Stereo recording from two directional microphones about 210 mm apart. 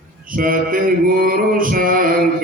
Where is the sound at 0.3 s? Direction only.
40° right (ahead or behind).